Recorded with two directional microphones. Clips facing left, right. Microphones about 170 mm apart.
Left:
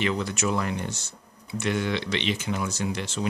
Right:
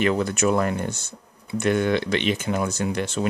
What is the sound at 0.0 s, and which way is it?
Speech, 50° right (ahead or behind).